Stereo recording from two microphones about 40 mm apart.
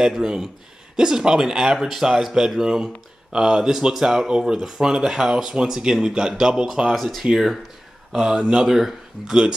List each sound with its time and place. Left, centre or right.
0.1 s speech: centre
6.9 s speech: centre
8.1 s speech: centre
8.6 s speech: centre